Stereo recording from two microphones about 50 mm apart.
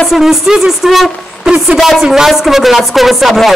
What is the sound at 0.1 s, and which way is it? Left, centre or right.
Speech, centre.